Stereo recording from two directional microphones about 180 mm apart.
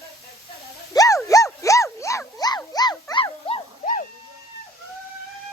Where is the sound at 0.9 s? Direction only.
20° left (ahead or behind).